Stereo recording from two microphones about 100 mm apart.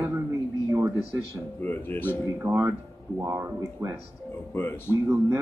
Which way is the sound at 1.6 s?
20° left (ahead or behind).